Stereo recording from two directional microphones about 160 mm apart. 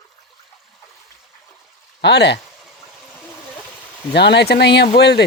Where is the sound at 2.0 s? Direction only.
90° left.